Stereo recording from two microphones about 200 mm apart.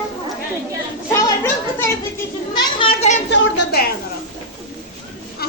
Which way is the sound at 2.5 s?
25° left (ahead or behind).